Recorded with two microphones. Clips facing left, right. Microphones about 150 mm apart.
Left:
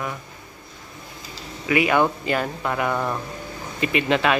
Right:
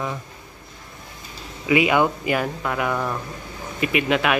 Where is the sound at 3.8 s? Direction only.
5° right (ahead or behind).